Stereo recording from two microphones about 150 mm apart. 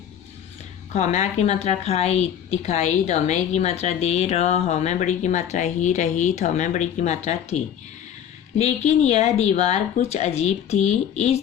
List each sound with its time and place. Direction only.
0.9 s a woman's voice: 50° left (ahead or behind)